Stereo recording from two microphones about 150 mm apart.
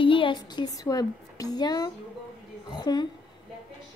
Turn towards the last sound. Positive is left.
turn(degrees=30)  # may be behind; listen again after turning